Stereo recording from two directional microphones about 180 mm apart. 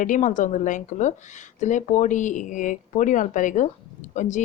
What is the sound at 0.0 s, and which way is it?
A woman's voice, 45° left (ahead or behind).